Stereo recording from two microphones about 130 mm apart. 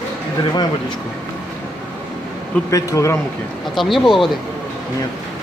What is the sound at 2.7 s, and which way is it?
Speech, 25° left (ahead or behind).